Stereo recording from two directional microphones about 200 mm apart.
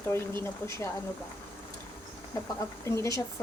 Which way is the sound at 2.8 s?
15° left (ahead or behind).